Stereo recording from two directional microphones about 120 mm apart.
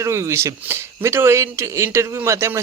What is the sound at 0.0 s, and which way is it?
Speech, 25° right (ahead or behind).